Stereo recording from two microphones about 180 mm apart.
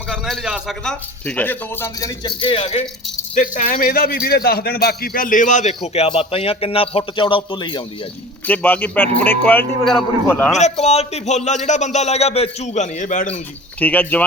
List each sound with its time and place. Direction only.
0.1 s a man's voice: centre (ahead or behind); by 2.8 s 30° left (ahead or behind)
3.3 s a man's voice: 45° left (ahead or behind); by 7.8 s 25° left (ahead or behind)
8.4 s a man's voice: 10° left (ahead or behind)
10.6 s speech: 35° left (ahead or behind)
13.7 s a man's voice: 10° left (ahead or behind)